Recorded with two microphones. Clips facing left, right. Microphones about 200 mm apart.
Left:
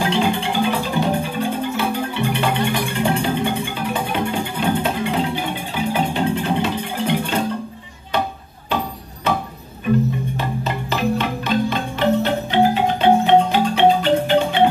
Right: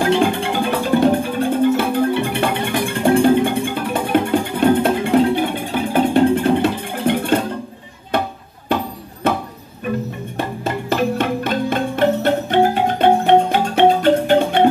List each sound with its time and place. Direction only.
0.0 s music: 55° right (ahead or behind)
10.3 s music: 50° right (ahead or behind)